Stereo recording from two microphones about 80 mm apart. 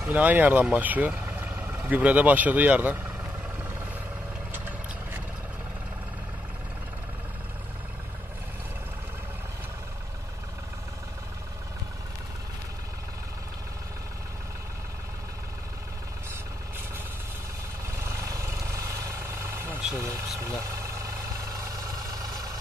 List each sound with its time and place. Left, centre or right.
0.1 s speech: right
4.5 s a sound: right
17.9 s vehicle: right
21.9 s vehicle: right